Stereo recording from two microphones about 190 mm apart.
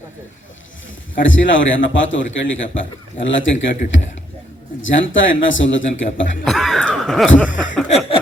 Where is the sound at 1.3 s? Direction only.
80° left.